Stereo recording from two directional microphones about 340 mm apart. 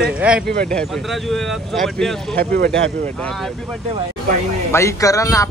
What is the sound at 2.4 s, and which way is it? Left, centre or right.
Speech, right.